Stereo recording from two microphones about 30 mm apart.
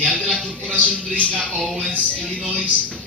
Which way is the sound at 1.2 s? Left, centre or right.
Left.